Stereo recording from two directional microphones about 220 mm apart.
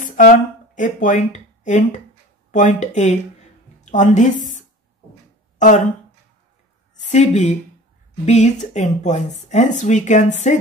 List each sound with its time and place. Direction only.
0.0 s a sound: 35° left (ahead or behind)
0.7 s a woman's voice: 35° left (ahead or behind)
5.6 s speech: 35° left (ahead or behind)
7.0 s speech: 30° left (ahead or behind)